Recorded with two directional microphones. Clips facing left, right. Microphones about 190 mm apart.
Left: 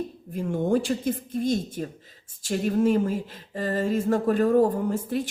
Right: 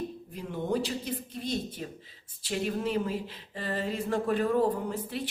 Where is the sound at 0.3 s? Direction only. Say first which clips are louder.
Left 7 dB; 45° left (ahead or behind).